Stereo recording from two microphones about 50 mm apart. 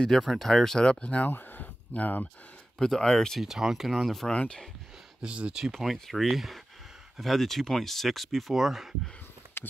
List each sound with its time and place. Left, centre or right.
0.2 s speech: centre; by 1.3 s left
1.3 s a sound: left
2.8 s speech: centre
3.3 s speech: centre
4.3 s speech: centre
5.2 s speech: right
5.7 s speech: centre
9.6 s a sound: left